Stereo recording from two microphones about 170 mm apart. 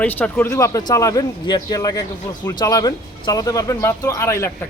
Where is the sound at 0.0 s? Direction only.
10° left (ahead or behind).